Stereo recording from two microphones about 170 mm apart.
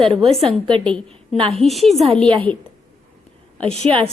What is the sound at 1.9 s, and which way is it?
Speech, 35° right (ahead or behind).